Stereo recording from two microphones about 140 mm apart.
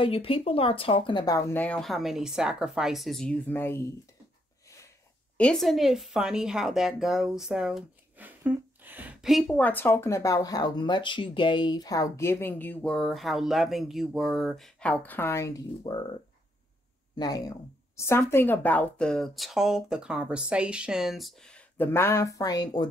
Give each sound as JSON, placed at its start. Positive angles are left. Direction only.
{"t": 0.0, "sound": "speech", "side_deg": 40}
{"t": 1.5, "sound": "speech", "side_deg": 10}
{"t": 5.4, "sound": "speech", "side_deg": 5}
{"t": 17.1, "sound": "a woman's voice", "side_deg": 30}